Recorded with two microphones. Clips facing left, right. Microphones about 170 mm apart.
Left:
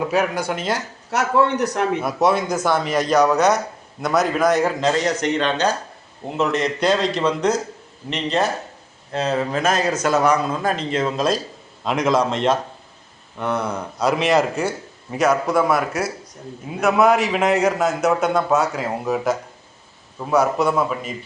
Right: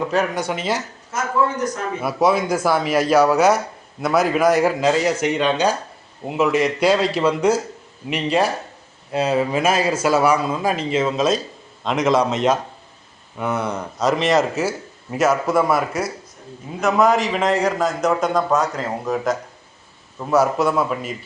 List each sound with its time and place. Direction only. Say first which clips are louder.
0.0 s a man's voice: even; 5° left (ahead or behind)
1.1 s a man's voice: left 3 dB; 70° left (ahead or behind)
2.0 s a man's voice: right 4 dB; centre (ahead or behind)